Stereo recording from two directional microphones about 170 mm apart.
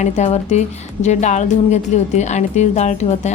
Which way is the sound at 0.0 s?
40° left (ahead or behind).